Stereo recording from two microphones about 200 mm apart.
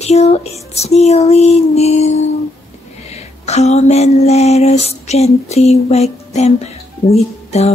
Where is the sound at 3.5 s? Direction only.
35° left (ahead or behind).